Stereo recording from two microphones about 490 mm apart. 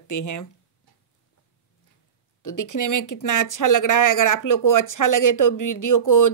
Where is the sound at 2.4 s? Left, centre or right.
Left.